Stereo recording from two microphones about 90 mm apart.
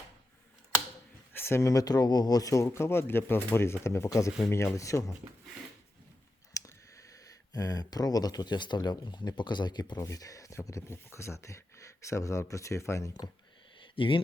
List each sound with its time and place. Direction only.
1.3 s speech: 25° left (ahead or behind)
2.6 s speech: 30° left (ahead or behind)
6.5 s a sound: 40° left (ahead or behind)
7.1 s speech: 40° left (ahead or behind)
10.1 s speech: 40° left (ahead or behind)
13.9 s speech: 70° left (ahead or behind)